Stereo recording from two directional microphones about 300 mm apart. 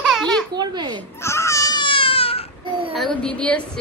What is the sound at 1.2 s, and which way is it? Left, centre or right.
Baby cry, centre.